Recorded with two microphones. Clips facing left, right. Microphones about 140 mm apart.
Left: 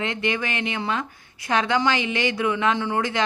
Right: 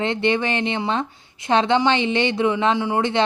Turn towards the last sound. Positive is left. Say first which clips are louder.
# right 4 dB
turn(degrees=-25)  # may be behind; listen again after turning